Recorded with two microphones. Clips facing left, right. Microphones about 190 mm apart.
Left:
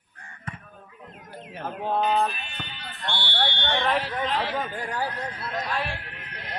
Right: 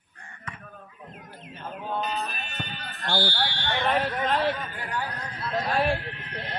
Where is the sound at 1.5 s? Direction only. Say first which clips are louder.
Left 5 dB; 80° left.